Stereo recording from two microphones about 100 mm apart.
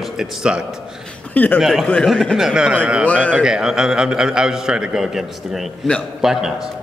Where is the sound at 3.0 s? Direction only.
10° left (ahead or behind).